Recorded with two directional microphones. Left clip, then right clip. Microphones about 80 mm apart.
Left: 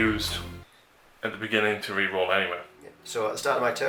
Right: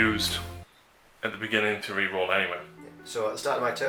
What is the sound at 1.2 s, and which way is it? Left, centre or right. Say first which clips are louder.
Speech: left 1 dB; right.